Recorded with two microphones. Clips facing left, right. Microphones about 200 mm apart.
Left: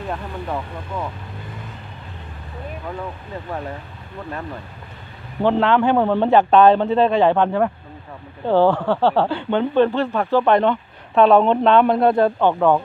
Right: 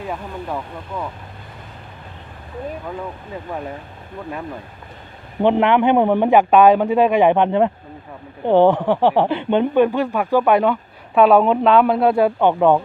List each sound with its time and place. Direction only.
0.0 s speech: 5° right (ahead or behind)
5.4 s speech: 15° right (ahead or behind)